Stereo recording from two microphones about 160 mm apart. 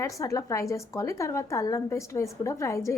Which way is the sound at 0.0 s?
20° left (ahead or behind).